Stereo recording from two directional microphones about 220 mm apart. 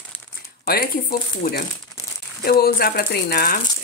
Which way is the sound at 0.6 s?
40° left (ahead or behind).